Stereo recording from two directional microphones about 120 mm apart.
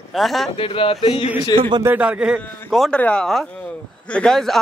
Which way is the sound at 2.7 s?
Centre (ahead or behind).